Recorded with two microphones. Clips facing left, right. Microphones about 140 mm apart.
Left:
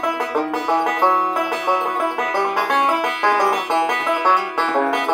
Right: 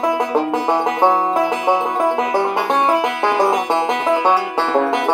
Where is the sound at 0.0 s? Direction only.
25° right (ahead or behind).